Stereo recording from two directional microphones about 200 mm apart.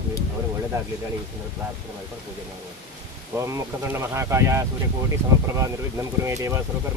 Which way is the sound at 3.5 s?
15° right (ahead or behind).